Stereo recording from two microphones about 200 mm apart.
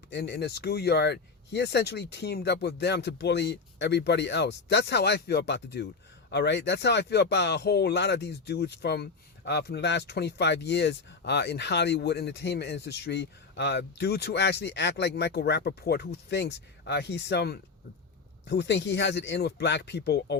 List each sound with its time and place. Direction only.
0.1 s speech: 55° left (ahead or behind)